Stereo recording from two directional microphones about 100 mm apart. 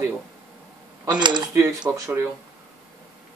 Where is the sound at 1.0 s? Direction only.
50° right (ahead or behind).